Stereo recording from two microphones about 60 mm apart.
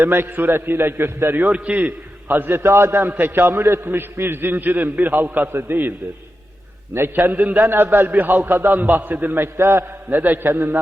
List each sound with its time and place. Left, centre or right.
0.0 s a man's voice: right
1.5 s a man's voice: right
2.2 s a man's voice: right
3.1 s a man's voice: right
6.9 s a man's voice: right
10.1 s a man's voice: right